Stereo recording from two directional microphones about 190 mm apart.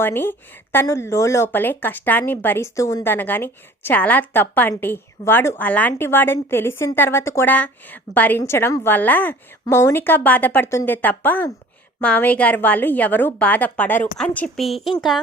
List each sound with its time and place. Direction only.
0.0 s speech: 10° left (ahead or behind)